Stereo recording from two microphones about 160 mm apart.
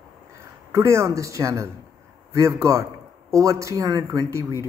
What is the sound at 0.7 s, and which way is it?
Speech, 15° right (ahead or behind).